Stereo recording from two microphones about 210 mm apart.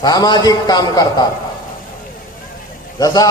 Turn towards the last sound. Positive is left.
turn(degrees=15)  # may be behind; listen again after turning